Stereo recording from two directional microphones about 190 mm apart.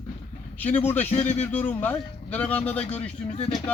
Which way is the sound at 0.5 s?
10° left (ahead or behind).